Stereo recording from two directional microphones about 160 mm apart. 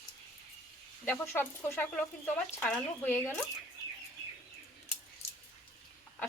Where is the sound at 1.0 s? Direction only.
10° left (ahead or behind).